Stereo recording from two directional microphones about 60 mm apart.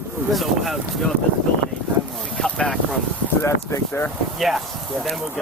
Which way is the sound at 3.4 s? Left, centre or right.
Left.